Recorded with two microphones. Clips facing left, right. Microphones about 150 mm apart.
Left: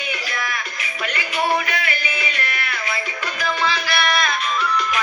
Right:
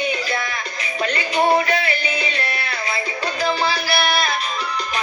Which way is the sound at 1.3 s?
35° right (ahead or behind).